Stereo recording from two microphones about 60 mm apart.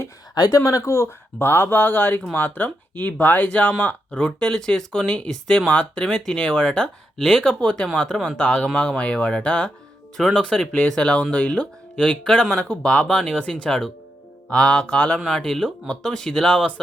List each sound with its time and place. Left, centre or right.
0.3 s speech: left
1.4 s speech: left; by 9.7 s centre
10.2 s speech: centre